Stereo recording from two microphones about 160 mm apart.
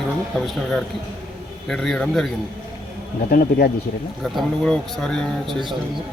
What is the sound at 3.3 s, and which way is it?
Speech, 70° left (ahead or behind).